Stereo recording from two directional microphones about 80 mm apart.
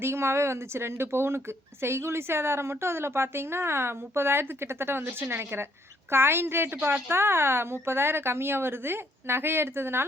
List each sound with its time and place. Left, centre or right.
0.0 s a woman's voice: right